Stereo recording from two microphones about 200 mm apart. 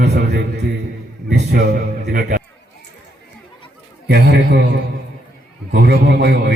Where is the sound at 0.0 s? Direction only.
55° right (ahead or behind).